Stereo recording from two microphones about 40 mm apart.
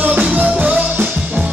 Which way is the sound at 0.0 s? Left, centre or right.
Right.